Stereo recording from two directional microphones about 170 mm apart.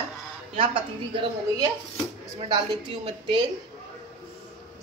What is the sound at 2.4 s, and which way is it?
Speech, 30° right (ahead or behind).